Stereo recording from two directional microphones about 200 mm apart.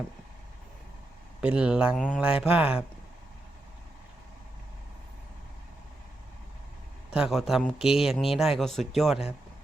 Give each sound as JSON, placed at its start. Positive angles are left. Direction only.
{"t": 1.4, "sound": "a man's voice", "side_deg": -5}
{"t": 7.1, "sound": "a man's voice", "side_deg": 0}